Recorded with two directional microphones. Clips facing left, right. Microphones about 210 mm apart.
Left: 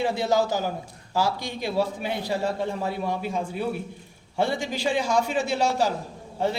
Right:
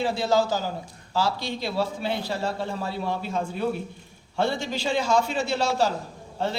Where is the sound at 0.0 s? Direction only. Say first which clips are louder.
Even; 20° left (ahead or behind).